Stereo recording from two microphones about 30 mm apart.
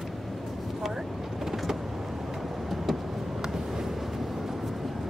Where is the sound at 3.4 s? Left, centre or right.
Centre.